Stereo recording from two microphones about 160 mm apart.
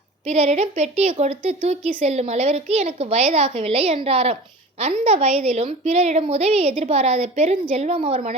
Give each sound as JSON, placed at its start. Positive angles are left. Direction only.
{"t": 0.3, "sound": "a woman's voice", "side_deg": -45}